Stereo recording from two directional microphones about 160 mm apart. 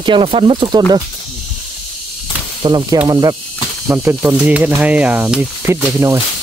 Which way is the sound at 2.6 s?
30° right (ahead or behind).